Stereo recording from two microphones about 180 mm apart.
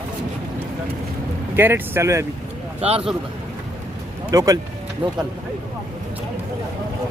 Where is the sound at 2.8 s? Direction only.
35° right (ahead or behind).